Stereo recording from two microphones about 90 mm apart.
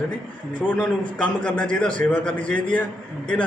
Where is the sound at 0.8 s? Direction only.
15° left (ahead or behind).